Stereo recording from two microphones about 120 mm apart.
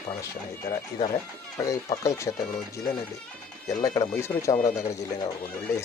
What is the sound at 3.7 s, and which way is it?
Speech, 25° left (ahead or behind).